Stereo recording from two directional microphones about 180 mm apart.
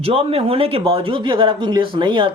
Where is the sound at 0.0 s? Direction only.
30° right (ahead or behind).